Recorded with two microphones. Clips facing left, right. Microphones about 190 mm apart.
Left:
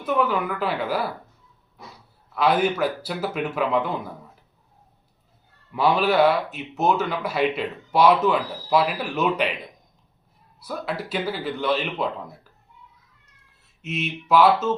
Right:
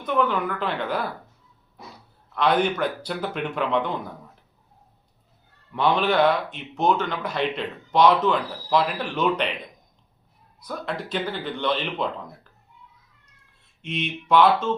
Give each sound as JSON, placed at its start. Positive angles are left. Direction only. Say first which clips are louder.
{"t": 0.0, "sound": "speech", "louder": "left 1 dB", "side_deg": 5}
{"t": 2.3, "sound": "speech", "louder": "left 1 dB", "side_deg": 5}
{"t": 5.7, "sound": "speech", "louder": "left 1 dB", "side_deg": 5}
{"t": 10.6, "sound": "speech", "louder": "left 1 dB", "side_deg": 5}
{"t": 13.8, "sound": "speech", "louder": "even", "side_deg": 5}